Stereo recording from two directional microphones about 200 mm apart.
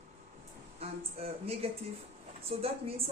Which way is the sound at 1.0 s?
30° right (ahead or behind).